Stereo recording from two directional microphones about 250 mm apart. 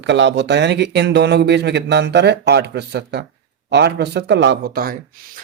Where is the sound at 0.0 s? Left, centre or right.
Right.